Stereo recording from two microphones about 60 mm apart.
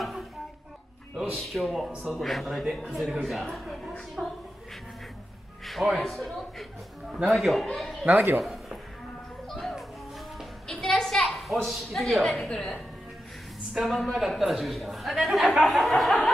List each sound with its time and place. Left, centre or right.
0.0 s a sound: centre
1.3 s a man's voice: centre
5.9 s a man's voice: centre
7.1 s a man's voice: centre
7.3 s a man's voice: centre
8.1 s speech: right
8.4 s speech: centre
9.5 s music: centre
10.7 s a sound: centre
11.6 s a man's voice: centre